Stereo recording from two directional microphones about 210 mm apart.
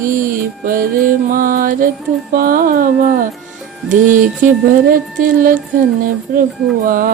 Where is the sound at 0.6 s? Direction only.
40° right (ahead or behind).